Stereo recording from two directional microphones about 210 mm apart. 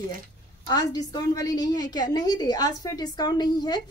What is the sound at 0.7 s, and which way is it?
A woman's voice, 20° left (ahead or behind).